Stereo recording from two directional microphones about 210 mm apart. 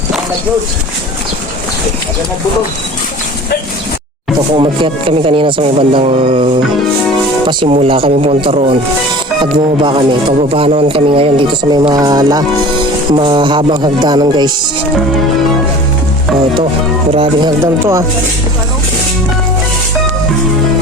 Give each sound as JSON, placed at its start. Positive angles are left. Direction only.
{"t": 4.5, "sound": "speech", "side_deg": -25}
{"t": 17.1, "sound": "speech", "side_deg": -25}
{"t": 17.6, "sound": "speech", "side_deg": -10}